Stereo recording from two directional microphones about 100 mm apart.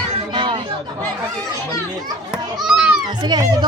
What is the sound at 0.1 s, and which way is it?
Chatter, 60° right (ahead or behind).